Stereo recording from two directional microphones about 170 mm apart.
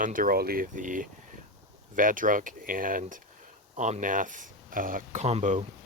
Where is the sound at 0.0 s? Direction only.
55° right (ahead or behind).